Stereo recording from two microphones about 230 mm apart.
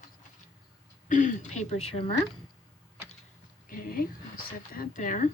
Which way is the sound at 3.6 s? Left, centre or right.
Left.